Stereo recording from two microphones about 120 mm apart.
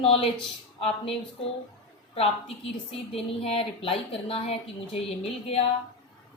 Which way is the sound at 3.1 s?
55° left (ahead or behind).